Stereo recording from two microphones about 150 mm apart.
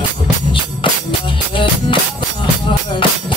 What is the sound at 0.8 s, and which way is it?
Music, 35° left (ahead or behind).